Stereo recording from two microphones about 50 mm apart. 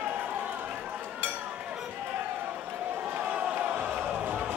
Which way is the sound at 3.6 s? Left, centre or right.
Right.